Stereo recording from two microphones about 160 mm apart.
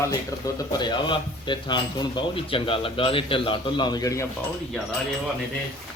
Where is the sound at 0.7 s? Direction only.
25° left (ahead or behind).